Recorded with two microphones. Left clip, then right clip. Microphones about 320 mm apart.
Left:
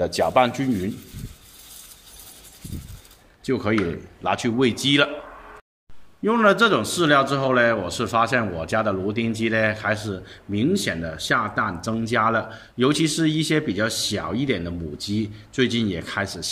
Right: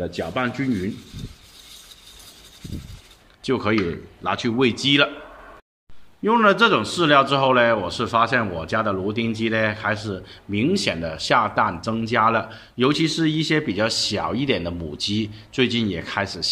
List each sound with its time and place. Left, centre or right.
0.1 s speech: centre
3.4 s a man's voice: centre
6.2 s a man's voice: centre